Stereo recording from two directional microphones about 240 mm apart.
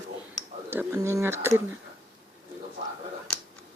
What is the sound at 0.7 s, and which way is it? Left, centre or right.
Speech, centre.